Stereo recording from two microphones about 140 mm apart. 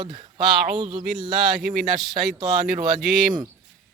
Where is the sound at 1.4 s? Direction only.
Centre (ahead or behind).